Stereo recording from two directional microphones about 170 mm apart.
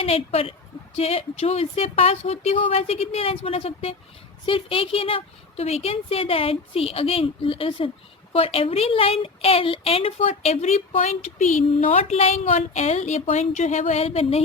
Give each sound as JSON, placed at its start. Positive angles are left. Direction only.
{"t": 0.0, "sound": "a woman's voice", "side_deg": 35}